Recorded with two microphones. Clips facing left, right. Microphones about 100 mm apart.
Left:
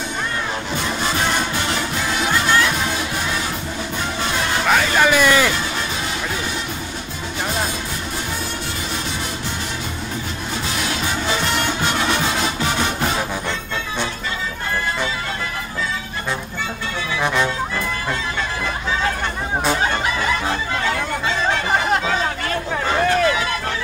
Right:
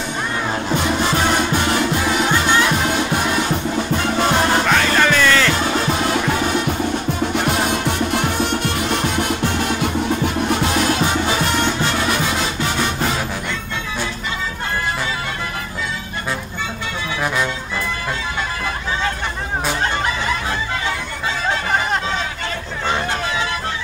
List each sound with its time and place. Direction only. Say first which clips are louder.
4.6 s music: even; 10° left (ahead or behind)
7.7 s music: right 8 dB; 65° right (ahead or behind)